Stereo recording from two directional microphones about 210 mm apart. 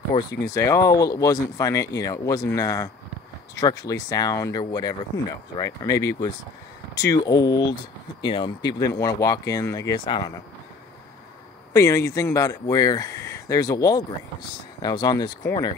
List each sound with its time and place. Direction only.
0.1 s a sound: 25° left (ahead or behind)
0.5 s speech: 15° left (ahead or behind)
11.7 s speech: 15° left (ahead or behind)